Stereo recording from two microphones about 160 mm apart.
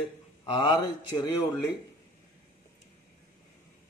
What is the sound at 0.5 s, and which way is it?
Speech, 30° left (ahead or behind).